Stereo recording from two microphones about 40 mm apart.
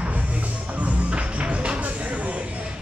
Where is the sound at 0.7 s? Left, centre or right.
Right.